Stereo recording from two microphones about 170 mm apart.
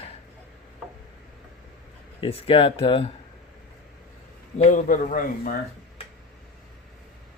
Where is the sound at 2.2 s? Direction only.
35° left (ahead or behind).